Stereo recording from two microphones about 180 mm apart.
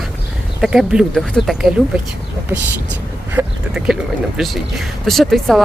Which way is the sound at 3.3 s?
5° right (ahead or behind).